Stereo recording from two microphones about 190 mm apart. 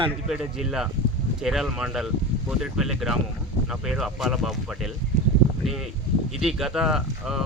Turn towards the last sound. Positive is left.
turn(degrees=-5)  # may be behind; listen again after turning